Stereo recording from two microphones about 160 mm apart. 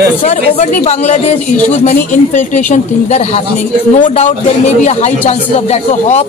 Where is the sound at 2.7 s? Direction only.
40° left (ahead or behind).